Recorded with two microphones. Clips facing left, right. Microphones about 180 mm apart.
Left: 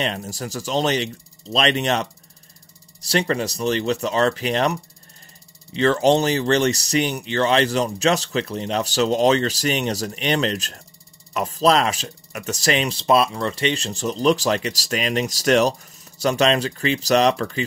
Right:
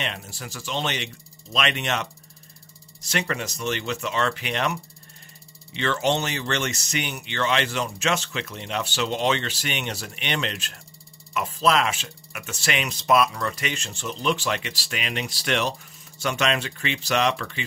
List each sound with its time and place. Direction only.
0.0 s speech: 40° left (ahead or behind)